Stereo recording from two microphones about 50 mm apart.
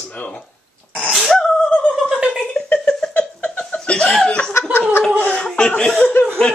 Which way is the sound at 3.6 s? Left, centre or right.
Centre.